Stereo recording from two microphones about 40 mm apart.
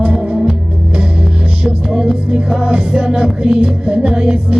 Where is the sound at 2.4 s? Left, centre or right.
Centre.